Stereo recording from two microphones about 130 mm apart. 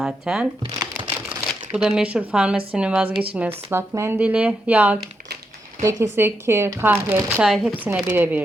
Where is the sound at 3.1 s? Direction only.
45° right (ahead or behind).